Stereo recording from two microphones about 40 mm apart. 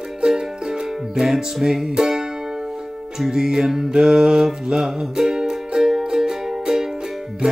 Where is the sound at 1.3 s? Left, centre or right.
Centre.